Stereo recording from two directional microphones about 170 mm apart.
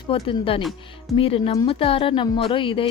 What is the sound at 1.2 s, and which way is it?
Speech, 35° left (ahead or behind).